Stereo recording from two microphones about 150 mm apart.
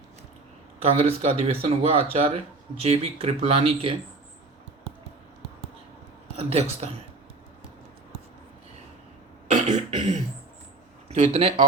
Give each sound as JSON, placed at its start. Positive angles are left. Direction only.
{"t": 0.8, "sound": "speech", "side_deg": -45}
{"t": 6.3, "sound": "speech", "side_deg": -45}
{"t": 9.5, "sound": "a sound", "side_deg": -55}
{"t": 11.1, "sound": "speech", "side_deg": -40}